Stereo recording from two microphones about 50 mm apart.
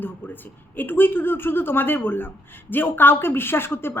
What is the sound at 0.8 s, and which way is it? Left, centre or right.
A woman's voice, left.